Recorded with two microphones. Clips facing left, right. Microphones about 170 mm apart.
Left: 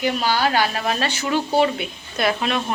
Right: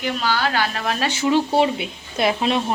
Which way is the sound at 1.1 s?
20° right (ahead or behind).